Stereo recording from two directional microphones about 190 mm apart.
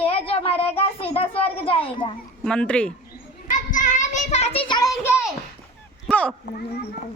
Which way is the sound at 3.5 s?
40° left (ahead or behind).